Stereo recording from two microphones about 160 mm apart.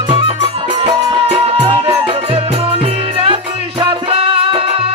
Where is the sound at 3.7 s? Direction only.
35° right (ahead or behind).